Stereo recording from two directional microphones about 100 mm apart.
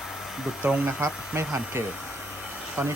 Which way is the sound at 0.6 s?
15° right (ahead or behind).